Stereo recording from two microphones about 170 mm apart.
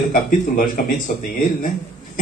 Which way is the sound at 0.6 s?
50° left (ahead or behind).